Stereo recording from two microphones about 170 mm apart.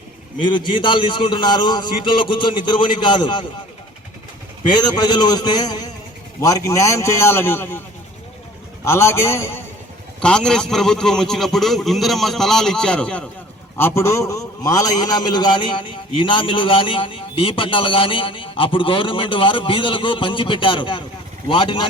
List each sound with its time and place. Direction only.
0.5 s a man's voice: 30° left (ahead or behind)
4.7 s a man's voice: 25° left (ahead or behind)
8.8 s a man's voice: 15° left (ahead or behind)
10.2 s a man's voice: 5° left (ahead or behind); by 21.8 s 25° left (ahead or behind)